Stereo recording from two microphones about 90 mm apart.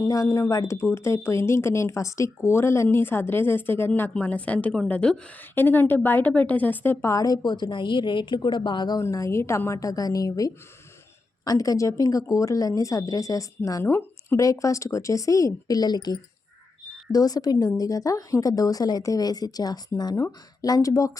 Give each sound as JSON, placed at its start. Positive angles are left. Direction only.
{"t": 0.0, "sound": "a woman's voice", "side_deg": 35}
{"t": 5.5, "sound": "a woman's voice", "side_deg": 25}
{"t": 7.0, "sound": "speech", "side_deg": 40}
{"t": 9.0, "sound": "speech", "side_deg": 35}
{"t": 13.8, "sound": "speech", "side_deg": 25}
{"t": 14.3, "sound": "a woman's voice", "side_deg": 35}